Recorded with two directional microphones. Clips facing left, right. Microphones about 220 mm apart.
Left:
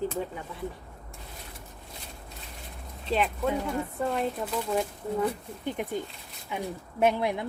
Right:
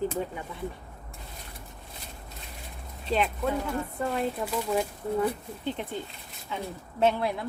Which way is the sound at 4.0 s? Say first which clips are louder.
Even; 5° right (ahead or behind).